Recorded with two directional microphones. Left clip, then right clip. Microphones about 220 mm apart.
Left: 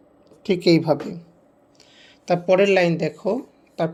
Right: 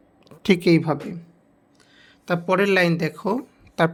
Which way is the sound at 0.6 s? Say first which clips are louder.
Left 2 dB; 20° right (ahead or behind).